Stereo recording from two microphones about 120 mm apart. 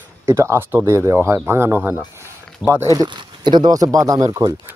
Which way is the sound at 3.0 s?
40° right (ahead or behind).